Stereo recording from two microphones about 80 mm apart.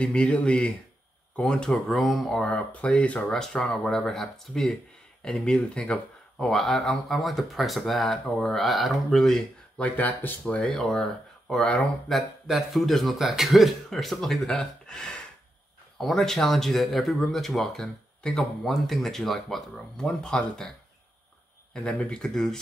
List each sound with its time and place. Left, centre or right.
0.0 s speech: centre
2.4 s speech: centre
9.8 s speech: left
10.6 s speech: centre
12.1 s speech: centre
21.7 s speech: centre